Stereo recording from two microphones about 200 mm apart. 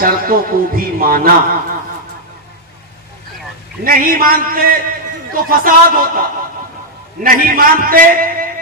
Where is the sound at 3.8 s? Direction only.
45° right (ahead or behind).